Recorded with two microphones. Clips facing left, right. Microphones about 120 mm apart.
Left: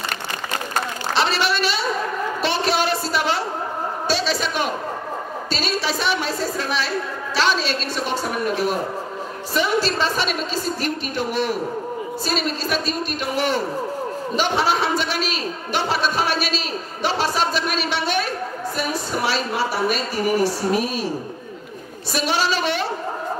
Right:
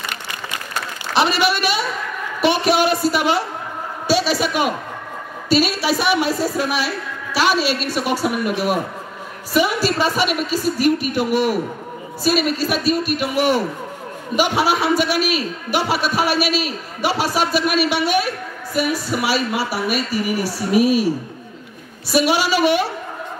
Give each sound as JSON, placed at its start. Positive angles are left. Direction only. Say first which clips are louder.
{"t": 1.1, "sound": "a sound", "louder": "right 4 dB", "side_deg": -15}
{"t": 5.5, "sound": "a man's voice", "louder": "right 7 dB", "side_deg": -10}
{"t": 20.2, "sound": "a woman's voice", "louder": "left 2 dB", "side_deg": 40}
{"t": 20.7, "sound": "a man's voice", "louder": "right 7 dB", "side_deg": -10}
{"t": 22.1, "sound": "a man's voice", "louder": "right 5 dB", "side_deg": -10}